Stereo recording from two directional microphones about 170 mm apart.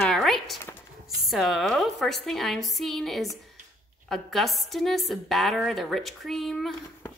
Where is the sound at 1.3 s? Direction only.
Centre (ahead or behind).